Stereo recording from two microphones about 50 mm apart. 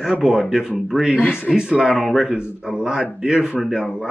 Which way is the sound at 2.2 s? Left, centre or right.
Centre.